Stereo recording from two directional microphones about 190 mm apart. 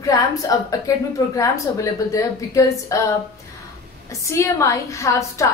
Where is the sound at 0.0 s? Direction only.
20° left (ahead or behind).